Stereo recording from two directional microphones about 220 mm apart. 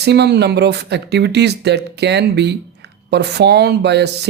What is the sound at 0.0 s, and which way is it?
Speech, 50° right (ahead or behind).